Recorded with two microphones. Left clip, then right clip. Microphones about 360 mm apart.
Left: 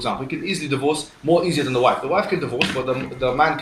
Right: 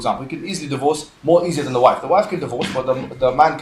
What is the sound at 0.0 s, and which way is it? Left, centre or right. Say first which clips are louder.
A man's voice: right 3 dB; centre.